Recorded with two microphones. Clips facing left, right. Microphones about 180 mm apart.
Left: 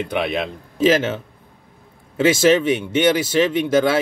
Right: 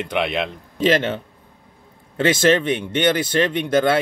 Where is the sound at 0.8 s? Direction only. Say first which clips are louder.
Left 2 dB; 5° left (ahead or behind).